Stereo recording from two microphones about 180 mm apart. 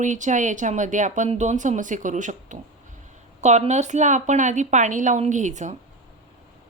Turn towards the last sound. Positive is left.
turn(degrees=-40)  # may be behind; listen again after turning